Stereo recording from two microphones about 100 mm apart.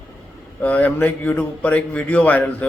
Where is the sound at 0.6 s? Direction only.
15° left (ahead or behind).